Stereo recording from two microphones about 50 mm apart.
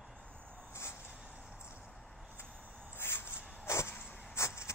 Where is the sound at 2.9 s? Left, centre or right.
Left.